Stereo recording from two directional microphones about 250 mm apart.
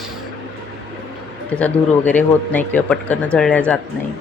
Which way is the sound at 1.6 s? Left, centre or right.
Centre.